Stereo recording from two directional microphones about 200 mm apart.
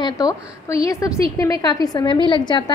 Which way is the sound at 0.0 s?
20° left (ahead or behind).